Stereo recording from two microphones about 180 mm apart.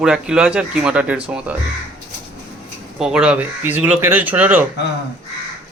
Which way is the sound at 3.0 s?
5° right (ahead or behind).